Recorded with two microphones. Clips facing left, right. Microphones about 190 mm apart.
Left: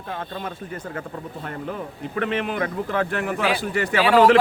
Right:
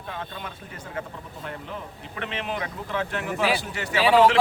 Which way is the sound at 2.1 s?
50° left (ahead or behind).